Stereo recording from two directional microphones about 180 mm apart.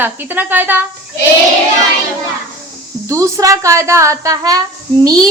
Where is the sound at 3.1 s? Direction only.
15° right (ahead or behind).